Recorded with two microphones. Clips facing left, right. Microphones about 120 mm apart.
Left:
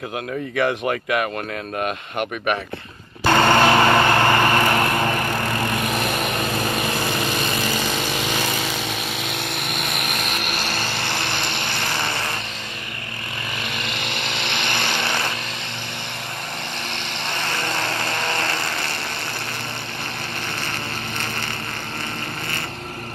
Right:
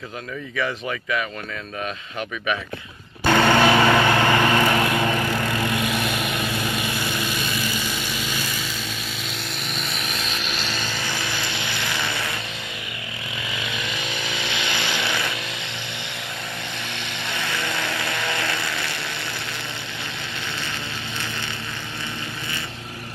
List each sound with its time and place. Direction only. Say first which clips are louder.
0.6 s speech: left 5 dB; 55° left (ahead or behind)
3.3 s vehicle: left 1 dB; 45° left (ahead or behind)
13.7 s vehicle: left 1 dB; 65° left (ahead or behind)
17.3 s vehicle: left 2 dB; 60° left (ahead or behind)